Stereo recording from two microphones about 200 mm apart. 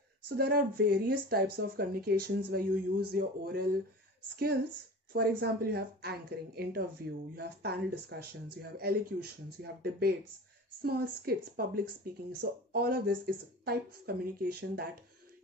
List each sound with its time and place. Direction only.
0.3 s speech: 50° right (ahead or behind)
5.1 s speech: 50° right (ahead or behind)